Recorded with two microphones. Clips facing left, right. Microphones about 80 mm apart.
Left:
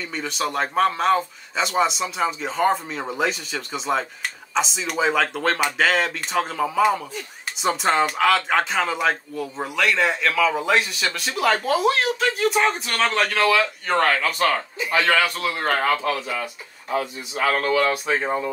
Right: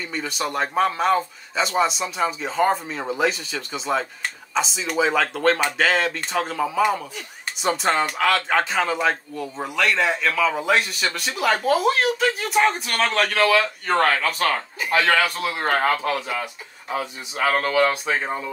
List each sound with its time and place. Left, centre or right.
0.0 s a man's voice: centre
17.0 s speech: right